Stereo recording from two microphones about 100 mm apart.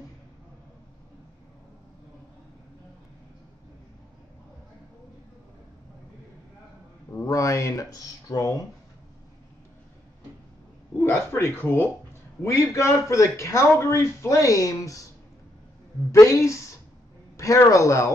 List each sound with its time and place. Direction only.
7.1 s speech: 30° left (ahead or behind)
11.0 s speech: 25° left (ahead or behind)
16.1 s speech: 30° left (ahead or behind)